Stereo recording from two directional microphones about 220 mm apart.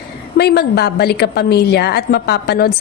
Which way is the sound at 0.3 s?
50° left (ahead or behind).